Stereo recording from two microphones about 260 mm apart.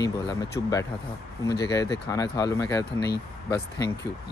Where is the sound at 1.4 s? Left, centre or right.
Left.